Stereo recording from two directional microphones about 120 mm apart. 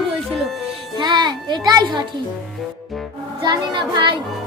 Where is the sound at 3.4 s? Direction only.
40° right (ahead or behind).